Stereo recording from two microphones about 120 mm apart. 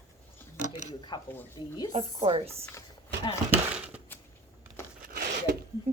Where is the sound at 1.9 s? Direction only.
55° right (ahead or behind).